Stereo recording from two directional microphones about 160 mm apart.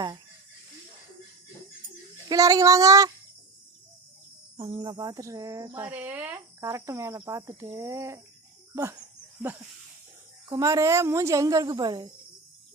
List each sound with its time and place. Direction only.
2.3 s speech: 20° right (ahead or behind)
4.5 s speech: 30° right (ahead or behind)